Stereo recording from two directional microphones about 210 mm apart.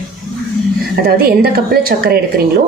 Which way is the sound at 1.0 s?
45° right (ahead or behind).